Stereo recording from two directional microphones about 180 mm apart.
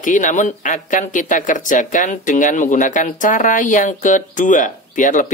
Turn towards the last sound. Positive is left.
turn(degrees=45)  # may be behind; listen again after turning